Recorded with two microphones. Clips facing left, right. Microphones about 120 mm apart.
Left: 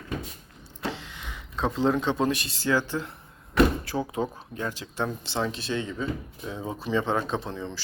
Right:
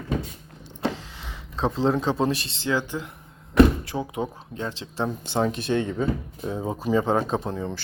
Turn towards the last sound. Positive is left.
turn(degrees=-45)  # may be behind; listen again after turning